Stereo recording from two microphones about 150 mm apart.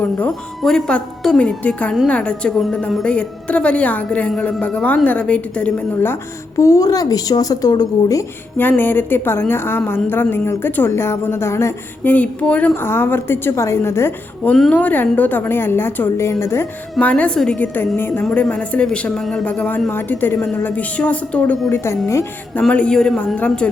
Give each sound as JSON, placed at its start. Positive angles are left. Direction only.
{"t": 0.0, "sound": "speech", "side_deg": 10}
{"t": 6.6, "sound": "speech", "side_deg": 20}
{"t": 14.5, "sound": "speech", "side_deg": 5}
{"t": 22.6, "sound": "speech", "side_deg": 5}